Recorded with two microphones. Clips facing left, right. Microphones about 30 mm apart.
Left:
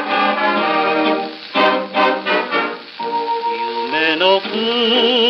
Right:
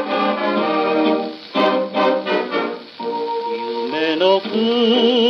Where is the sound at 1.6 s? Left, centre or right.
Left.